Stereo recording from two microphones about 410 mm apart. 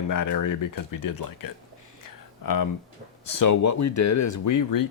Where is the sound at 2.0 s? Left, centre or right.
Left.